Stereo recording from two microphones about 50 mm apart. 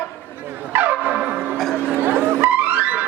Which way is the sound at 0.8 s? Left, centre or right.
Right.